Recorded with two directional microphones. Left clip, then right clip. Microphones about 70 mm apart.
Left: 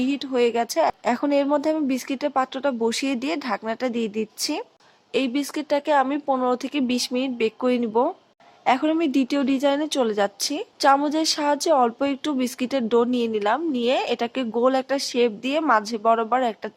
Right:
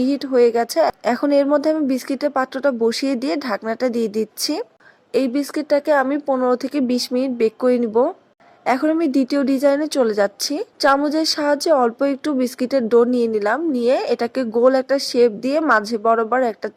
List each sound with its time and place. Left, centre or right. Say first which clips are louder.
0.3 s a woman's voice: right 6 dB; right
5.1 s a woman's voice: right 4 dB; right